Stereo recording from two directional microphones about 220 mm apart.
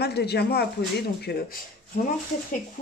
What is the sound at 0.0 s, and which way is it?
Speech, 50° left (ahead or behind).